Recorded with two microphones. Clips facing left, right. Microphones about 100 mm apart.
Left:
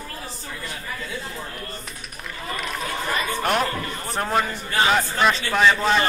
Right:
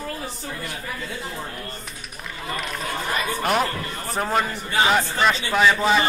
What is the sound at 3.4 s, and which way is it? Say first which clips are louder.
A man's voice: right 1 dB; centre (ahead or behind).